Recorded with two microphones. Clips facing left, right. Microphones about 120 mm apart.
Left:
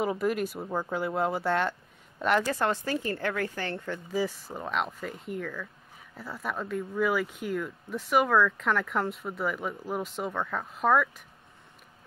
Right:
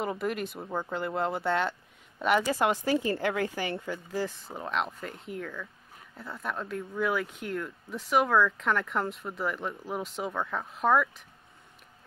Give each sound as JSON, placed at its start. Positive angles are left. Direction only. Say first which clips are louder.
{"t": 0.0, "sound": "speech", "louder": "left 3 dB", "side_deg": 0}